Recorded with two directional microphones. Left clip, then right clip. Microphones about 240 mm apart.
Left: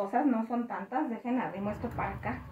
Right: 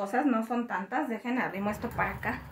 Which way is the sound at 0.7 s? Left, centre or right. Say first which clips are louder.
Right 2 dB; right.